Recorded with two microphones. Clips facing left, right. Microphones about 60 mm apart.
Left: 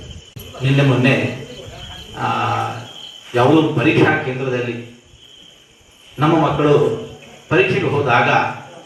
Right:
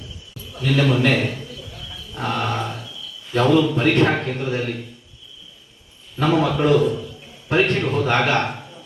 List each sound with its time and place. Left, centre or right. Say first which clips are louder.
0.4 s a man's voice: left 3 dB; centre
6.1 s a man's voice: left 4 dB; centre